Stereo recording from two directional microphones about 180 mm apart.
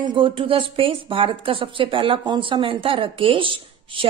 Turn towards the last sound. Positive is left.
turn(degrees=-30)  # may be behind; listen again after turning